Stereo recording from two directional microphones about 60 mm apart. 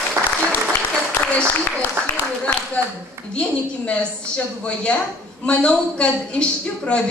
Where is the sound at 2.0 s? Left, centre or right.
Right.